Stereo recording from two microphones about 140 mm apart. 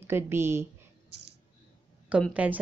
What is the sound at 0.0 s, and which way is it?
Speech, 15° right (ahead or behind).